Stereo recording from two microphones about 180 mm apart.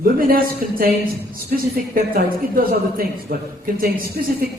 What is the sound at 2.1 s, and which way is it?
Speech, 55° right (ahead or behind).